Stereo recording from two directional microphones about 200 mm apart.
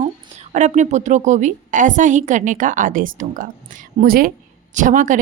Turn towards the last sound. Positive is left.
turn(degrees=-40)  # may be behind; listen again after turning